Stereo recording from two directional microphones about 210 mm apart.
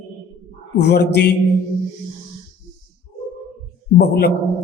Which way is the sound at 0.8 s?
55° left (ahead or behind).